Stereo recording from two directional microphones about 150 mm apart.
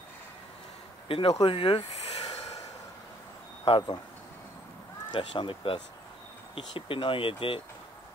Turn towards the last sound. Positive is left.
turn(degrees=35)  # may be behind; listen again after turning